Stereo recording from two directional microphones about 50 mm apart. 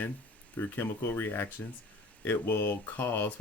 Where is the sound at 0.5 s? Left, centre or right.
Left.